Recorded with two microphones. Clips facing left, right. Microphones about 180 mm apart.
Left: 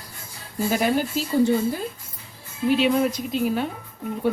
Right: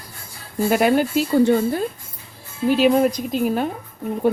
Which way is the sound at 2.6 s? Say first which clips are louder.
Right 4 dB; 40° right (ahead or behind).